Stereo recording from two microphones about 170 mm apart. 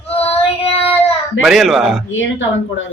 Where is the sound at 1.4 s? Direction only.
Centre (ahead or behind).